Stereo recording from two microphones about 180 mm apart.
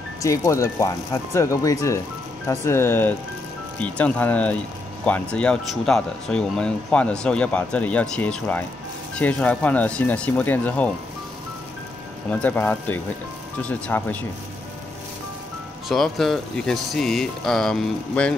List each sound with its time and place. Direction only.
0.2 s speech: 15° left (ahead or behind)
12.3 s speech: 10° left (ahead or behind)
15.9 s speech: centre (ahead or behind)